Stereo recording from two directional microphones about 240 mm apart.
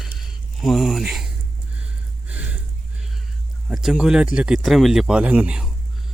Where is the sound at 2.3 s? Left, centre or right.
Centre.